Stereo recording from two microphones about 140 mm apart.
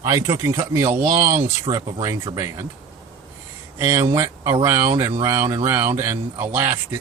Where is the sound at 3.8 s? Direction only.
15° right (ahead or behind).